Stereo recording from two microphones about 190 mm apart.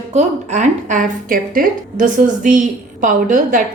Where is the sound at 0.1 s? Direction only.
40° right (ahead or behind).